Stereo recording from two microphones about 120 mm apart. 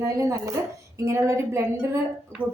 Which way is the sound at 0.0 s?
25° right (ahead or behind).